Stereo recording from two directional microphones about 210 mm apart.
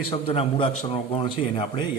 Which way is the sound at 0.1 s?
25° left (ahead or behind).